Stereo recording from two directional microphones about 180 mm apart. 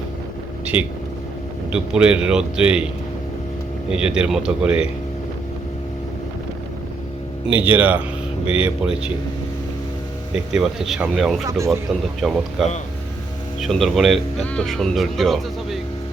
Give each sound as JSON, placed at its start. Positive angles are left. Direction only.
{"t": 0.6, "sound": "speech", "side_deg": -5}
{"t": 3.8, "sound": "speech", "side_deg": -5}
{"t": 7.5, "sound": "speech", "side_deg": -10}
{"t": 10.3, "sound": "speech", "side_deg": 0}
{"t": 11.4, "sound": "speech", "side_deg": -15}
{"t": 12.2, "sound": "speech", "side_deg": 0}